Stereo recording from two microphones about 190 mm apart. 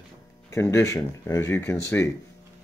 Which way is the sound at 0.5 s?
15° left (ahead or behind).